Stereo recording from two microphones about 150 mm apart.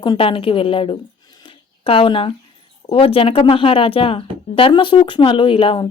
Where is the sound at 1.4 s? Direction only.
35° left (ahead or behind).